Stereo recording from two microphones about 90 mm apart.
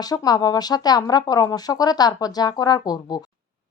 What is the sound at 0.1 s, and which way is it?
A woman's voice, 45° left (ahead or behind).